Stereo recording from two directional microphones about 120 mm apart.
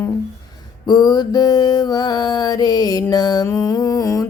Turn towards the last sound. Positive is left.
turn(degrees=30)  # may be behind; listen again after turning